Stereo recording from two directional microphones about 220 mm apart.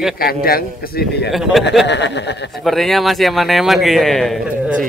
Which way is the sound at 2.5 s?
Centre (ahead or behind).